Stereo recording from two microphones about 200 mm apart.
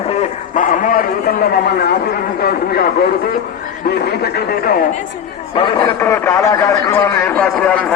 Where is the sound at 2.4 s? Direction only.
50° left (ahead or behind).